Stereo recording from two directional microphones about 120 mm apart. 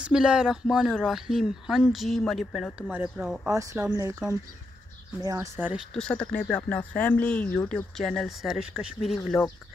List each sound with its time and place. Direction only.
0.0 s speech: 5° right (ahead or behind)
3.9 s speech: 25° right (ahead or behind)
5.2 s speech: 30° right (ahead or behind)
5.9 s speech: 10° left (ahead or behind)